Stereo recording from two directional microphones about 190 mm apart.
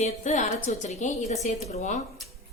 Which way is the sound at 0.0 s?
40° left (ahead or behind).